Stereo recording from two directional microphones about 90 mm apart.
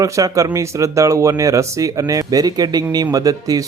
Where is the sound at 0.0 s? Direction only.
40° right (ahead or behind).